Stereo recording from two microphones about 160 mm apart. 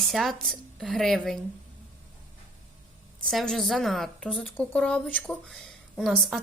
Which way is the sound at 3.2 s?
Centre (ahead or behind).